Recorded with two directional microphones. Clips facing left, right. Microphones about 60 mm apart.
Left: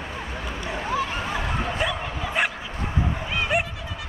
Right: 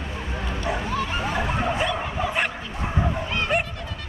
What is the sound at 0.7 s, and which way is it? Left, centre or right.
Bow-wow, centre.